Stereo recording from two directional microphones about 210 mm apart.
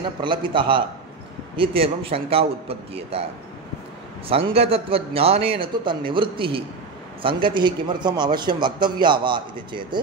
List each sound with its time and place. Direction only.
0.2 s a man's voice: 25° right (ahead or behind)
4.3 s a man's voice: 25° right (ahead or behind)